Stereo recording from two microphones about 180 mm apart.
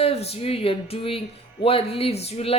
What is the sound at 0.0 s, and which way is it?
Speech, 35° left (ahead or behind).